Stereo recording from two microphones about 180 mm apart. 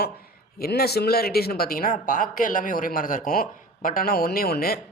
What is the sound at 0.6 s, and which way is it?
A man's voice, 60° left (ahead or behind).